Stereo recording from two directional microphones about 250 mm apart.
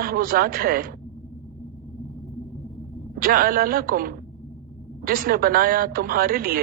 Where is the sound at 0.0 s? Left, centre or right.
Right.